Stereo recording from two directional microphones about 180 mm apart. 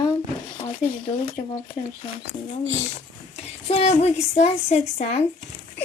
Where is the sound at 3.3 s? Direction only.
35° left (ahead or behind).